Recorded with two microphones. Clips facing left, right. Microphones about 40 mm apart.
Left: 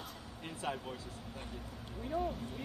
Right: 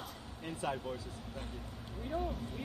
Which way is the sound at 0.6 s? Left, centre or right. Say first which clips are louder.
Right 2 dB; left.